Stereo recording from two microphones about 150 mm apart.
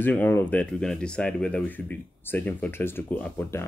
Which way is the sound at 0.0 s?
10° left (ahead or behind).